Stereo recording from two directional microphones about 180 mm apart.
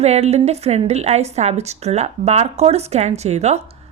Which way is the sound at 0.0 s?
35° right (ahead or behind).